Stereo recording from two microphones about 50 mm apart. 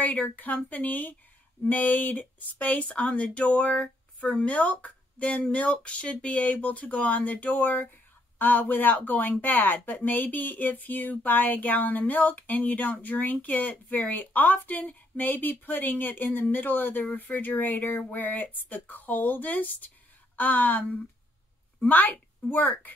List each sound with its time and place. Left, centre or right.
0.0 s speech: left
21.8 s speech: left